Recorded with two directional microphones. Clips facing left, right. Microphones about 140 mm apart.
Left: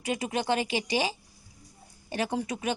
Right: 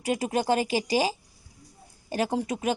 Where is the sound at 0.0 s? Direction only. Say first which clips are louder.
Right 4 dB; 40° right (ahead or behind).